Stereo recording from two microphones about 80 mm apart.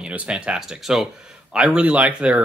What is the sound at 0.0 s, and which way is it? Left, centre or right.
Speech, centre.